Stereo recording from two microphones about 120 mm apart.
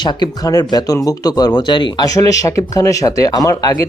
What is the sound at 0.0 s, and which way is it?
Speech, 35° left (ahead or behind).